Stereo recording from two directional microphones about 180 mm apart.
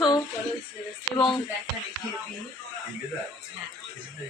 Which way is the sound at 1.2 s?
30° left (ahead or behind).